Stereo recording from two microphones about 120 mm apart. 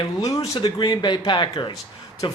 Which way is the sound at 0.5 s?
40° left (ahead or behind).